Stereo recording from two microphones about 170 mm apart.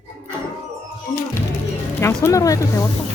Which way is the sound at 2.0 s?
15° left (ahead or behind).